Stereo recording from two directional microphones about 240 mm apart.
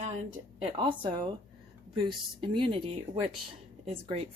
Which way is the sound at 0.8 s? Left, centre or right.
Centre.